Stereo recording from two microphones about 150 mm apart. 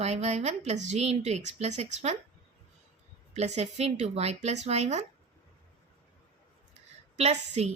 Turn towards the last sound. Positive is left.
turn(degrees=-45)  # may be behind; listen again after turning